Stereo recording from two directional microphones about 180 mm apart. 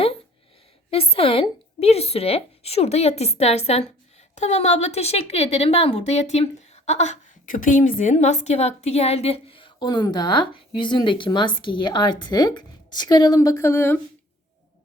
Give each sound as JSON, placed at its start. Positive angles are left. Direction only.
{"t": 0.9, "sound": "a woman's voice", "side_deg": 30}